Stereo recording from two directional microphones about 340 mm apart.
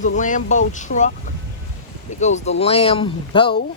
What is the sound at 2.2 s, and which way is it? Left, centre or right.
Speech, centre.